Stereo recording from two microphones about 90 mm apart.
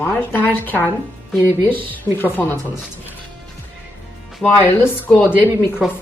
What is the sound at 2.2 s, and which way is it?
Speech, 20° left (ahead or behind).